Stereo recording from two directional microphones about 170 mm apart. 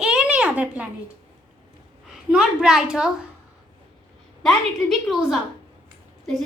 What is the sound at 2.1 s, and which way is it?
A woman's voice, 5° right (ahead or behind).